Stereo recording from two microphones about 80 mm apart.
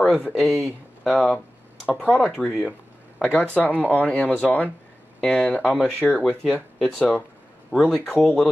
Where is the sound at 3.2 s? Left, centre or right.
Centre.